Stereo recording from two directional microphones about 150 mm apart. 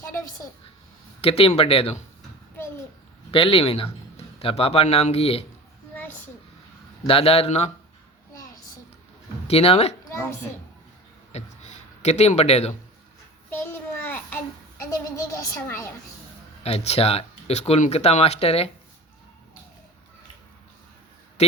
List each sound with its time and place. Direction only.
1.2 s speech: 40° left (ahead or behind)
3.3 s speech: 40° left (ahead or behind)
7.1 s speech: 40° left (ahead or behind)
9.5 s speech: 40° left (ahead or behind)
10.0 s a sound: 20° left (ahead or behind)
11.3 s a sound: 45° left (ahead or behind)
13.7 s child singing: 15° left (ahead or behind)
15.1 s a sound: 20° left (ahead or behind)
16.6 s speech: 45° left (ahead or behind)